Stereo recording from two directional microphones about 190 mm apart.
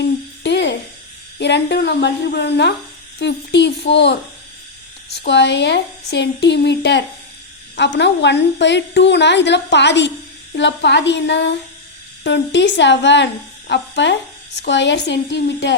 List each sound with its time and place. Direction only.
0.4 s music: 65° left (ahead or behind)
1.4 s a woman's voice: 65° left (ahead or behind)